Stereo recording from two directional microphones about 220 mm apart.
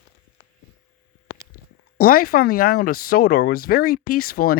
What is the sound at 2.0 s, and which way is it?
Speech, 40° left (ahead or behind).